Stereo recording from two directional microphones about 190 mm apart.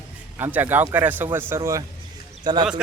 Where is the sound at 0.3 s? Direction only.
10° right (ahead or behind).